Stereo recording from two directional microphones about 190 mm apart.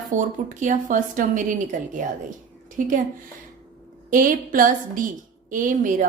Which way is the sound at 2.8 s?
45° right (ahead or behind).